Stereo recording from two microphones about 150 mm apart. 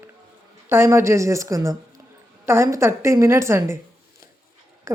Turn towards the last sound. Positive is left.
turn(degrees=-20)  # may be behind; listen again after turning